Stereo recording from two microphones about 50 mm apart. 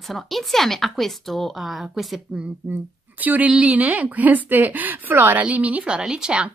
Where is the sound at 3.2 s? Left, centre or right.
Right.